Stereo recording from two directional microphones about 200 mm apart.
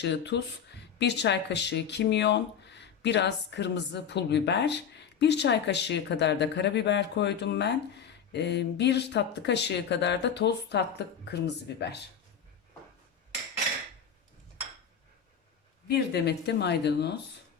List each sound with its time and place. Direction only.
0.0 s speech: 60° left (ahead or behind)
15.9 s speech: 55° left (ahead or behind)